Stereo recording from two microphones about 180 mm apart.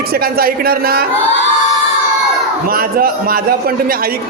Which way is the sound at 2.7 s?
55° right (ahead or behind).